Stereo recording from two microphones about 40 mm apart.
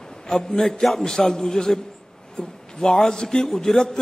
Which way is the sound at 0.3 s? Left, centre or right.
Centre.